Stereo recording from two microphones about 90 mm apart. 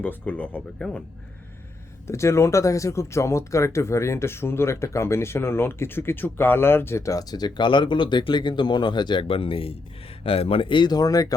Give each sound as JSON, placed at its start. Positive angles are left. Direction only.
{"t": 0.0, "sound": "speech", "side_deg": 20}
{"t": 2.0, "sound": "speech", "side_deg": 30}
{"t": 9.2, "sound": "speech", "side_deg": 85}